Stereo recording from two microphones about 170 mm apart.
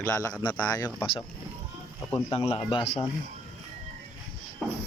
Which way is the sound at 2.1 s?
35° left (ahead or behind).